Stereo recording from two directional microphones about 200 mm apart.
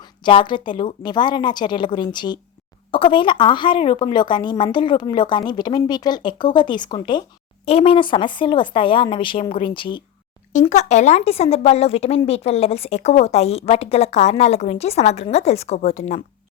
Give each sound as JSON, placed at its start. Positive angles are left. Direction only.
{"t": 0.0, "sound": "a woman's voice", "side_deg": 25}
{"t": 10.5, "sound": "speech", "side_deg": 35}